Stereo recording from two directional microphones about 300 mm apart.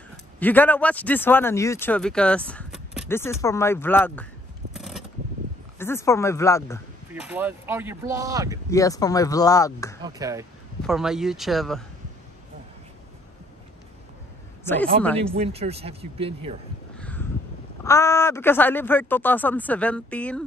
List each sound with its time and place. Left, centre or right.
0.4 s speech: centre
4.7 s a sound: centre
5.8 s speech: centre
7.2 s speech: centre
8.6 s speech: centre
10.0 s speech: centre
14.6 s a man's voice: centre
15.3 s speech: centre
17.0 s crow: centre
17.8 s speech: centre